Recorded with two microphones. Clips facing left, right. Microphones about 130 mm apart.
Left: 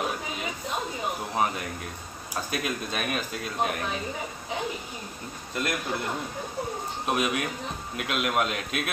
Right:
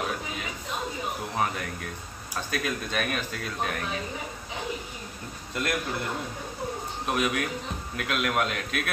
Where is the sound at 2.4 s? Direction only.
10° left (ahead or behind).